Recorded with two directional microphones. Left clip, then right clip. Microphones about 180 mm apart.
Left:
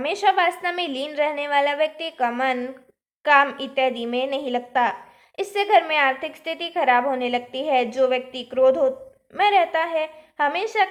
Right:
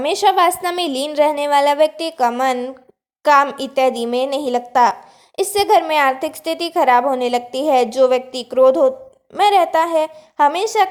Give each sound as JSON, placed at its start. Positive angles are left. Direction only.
{"t": 0.0, "sound": "a woman's voice", "side_deg": -40}